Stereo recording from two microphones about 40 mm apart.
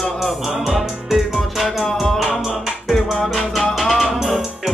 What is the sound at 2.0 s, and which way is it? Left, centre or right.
Music, centre.